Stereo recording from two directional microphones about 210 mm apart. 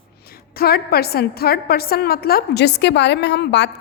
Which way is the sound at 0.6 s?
45° left (ahead or behind).